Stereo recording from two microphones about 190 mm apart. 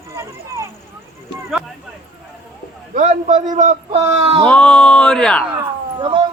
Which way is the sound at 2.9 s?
40° right (ahead or behind).